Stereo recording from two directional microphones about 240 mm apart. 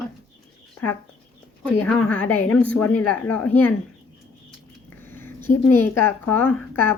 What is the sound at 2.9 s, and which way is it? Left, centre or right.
Speech, left.